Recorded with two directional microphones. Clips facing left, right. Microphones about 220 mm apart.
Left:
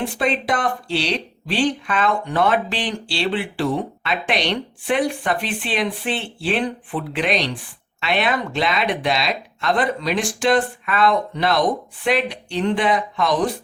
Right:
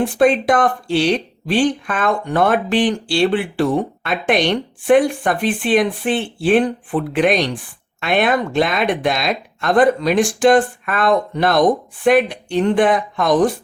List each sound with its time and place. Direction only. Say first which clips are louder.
0.0 s speech: right 8 dB; 50° right (ahead or behind)